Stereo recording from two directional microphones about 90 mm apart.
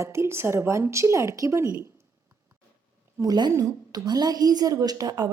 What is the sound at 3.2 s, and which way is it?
A woman's voice, 50° right (ahead or behind).